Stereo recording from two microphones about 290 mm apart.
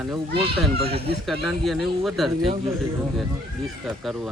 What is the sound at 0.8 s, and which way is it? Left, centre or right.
Speech, centre.